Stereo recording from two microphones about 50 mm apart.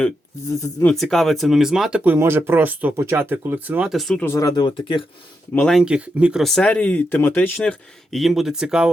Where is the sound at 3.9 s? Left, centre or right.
Centre.